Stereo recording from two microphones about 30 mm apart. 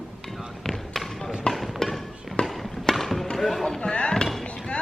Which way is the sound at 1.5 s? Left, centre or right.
Centre.